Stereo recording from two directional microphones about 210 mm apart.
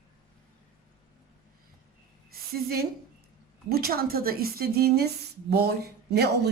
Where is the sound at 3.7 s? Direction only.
45° right (ahead or behind).